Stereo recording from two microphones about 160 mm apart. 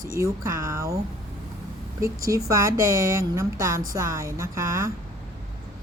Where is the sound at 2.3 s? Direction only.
20° right (ahead or behind).